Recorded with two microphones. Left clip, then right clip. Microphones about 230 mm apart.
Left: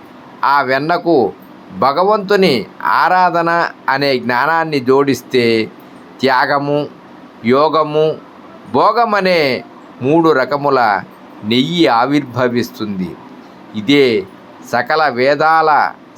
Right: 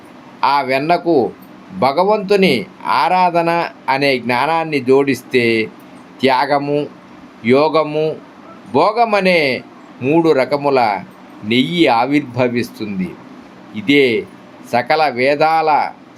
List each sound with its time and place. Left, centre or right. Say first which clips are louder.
0.4 s speech: left 1 dB; centre